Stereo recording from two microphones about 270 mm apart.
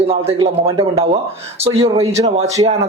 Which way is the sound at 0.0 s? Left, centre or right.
Right.